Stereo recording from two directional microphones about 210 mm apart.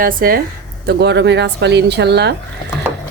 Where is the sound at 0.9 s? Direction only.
55° right (ahead or behind).